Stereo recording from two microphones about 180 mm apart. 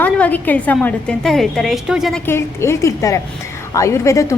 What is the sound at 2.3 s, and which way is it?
A woman's voice, 15° left (ahead or behind).